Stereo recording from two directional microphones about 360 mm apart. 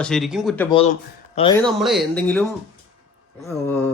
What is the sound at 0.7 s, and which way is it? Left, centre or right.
Speech, centre.